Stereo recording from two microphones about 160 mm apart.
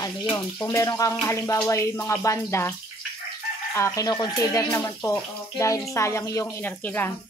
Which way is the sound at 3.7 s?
20° left (ahead or behind).